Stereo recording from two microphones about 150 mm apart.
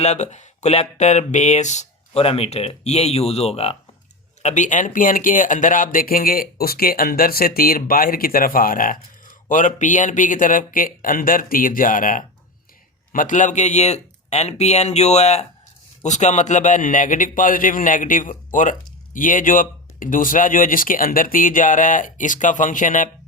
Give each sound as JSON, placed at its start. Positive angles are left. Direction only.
{"t": 0.0, "sound": "speech", "side_deg": 50}
{"t": 4.4, "sound": "a man's voice", "side_deg": 55}